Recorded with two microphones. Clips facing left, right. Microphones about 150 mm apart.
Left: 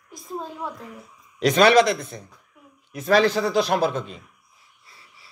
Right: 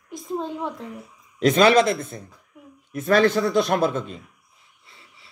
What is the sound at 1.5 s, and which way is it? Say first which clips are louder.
A man's voice: left 1 dB; 45° right (ahead or behind).